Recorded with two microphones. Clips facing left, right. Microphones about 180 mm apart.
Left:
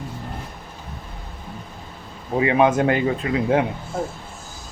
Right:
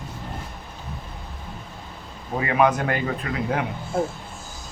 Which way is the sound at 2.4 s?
25° left (ahead or behind).